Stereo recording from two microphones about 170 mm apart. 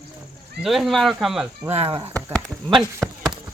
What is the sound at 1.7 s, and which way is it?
Chop, 35° right (ahead or behind).